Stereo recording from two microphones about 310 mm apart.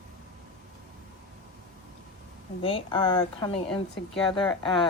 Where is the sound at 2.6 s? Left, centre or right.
Centre.